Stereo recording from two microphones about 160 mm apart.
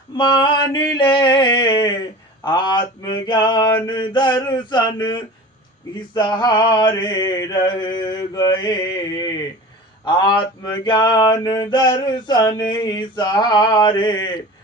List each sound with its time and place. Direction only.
0.2 s mantra: 30° left (ahead or behind)